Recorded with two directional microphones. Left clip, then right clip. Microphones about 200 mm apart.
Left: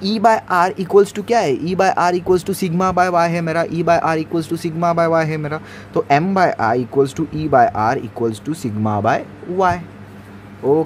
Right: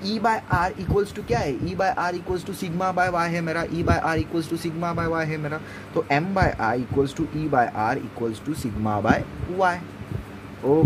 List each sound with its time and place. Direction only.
0.0 s speech: 30° left (ahead or behind)